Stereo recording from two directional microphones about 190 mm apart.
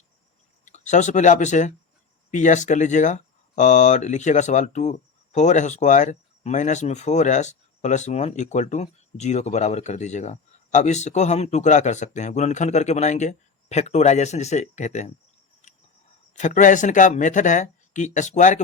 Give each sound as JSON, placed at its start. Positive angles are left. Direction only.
{"t": 0.6, "sound": "speech", "side_deg": 40}
{"t": 16.3, "sound": "speech", "side_deg": 40}